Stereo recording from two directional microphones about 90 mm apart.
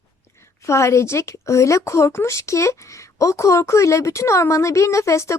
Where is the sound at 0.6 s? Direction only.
30° left (ahead or behind).